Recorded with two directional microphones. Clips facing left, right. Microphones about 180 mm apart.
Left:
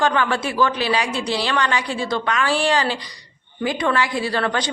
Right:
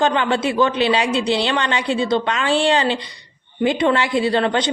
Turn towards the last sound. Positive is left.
turn(degrees=-20)  # may be behind; listen again after turning